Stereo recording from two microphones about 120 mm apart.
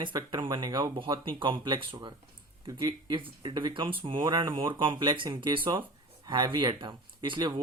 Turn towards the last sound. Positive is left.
turn(degrees=-40)  # may be behind; listen again after turning